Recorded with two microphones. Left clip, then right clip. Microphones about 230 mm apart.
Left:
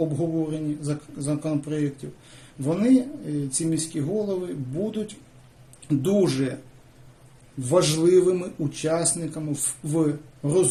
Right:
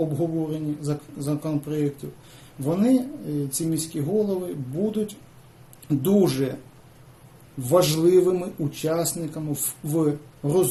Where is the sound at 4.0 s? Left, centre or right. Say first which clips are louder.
Right 5 dB; left.